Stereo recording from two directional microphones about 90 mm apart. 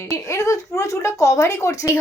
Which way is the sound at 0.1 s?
35° left (ahead or behind).